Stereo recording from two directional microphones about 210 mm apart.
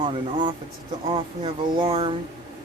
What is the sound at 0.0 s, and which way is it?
Speech, 25° right (ahead or behind).